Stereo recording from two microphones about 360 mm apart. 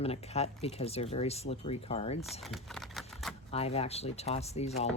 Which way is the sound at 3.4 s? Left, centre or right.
Centre.